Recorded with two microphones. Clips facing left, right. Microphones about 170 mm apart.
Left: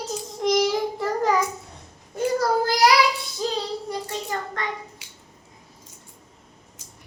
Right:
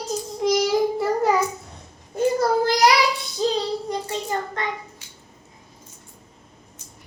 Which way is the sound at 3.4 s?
20° right (ahead or behind).